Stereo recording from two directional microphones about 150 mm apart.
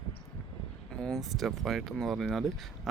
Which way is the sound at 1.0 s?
Centre (ahead or behind).